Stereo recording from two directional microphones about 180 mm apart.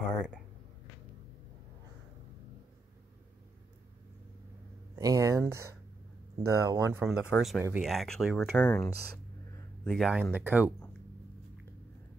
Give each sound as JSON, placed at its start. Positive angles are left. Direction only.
{"t": 4.9, "sound": "speech", "side_deg": -20}
{"t": 7.0, "sound": "speech", "side_deg": -5}
{"t": 8.6, "sound": "speech", "side_deg": 10}
{"t": 9.8, "sound": "speech", "side_deg": 0}